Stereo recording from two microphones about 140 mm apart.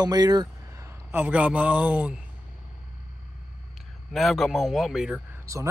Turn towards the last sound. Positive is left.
turn(degrees=-5)  # may be behind; listen again after turning